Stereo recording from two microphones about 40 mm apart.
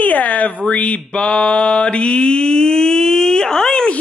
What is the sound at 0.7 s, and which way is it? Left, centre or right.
Mantra, left.